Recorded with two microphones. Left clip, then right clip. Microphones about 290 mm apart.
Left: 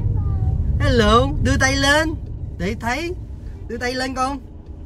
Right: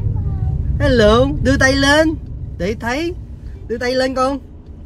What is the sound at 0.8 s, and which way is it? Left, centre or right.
Speech, centre.